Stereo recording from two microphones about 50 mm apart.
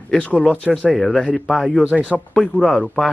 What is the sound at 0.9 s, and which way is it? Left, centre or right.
Speech, centre.